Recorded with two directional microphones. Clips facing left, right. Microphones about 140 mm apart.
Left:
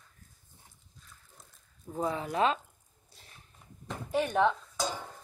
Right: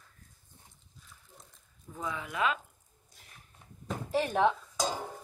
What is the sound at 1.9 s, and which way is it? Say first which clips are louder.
Speech: left 6 dB; 40° left (ahead or behind).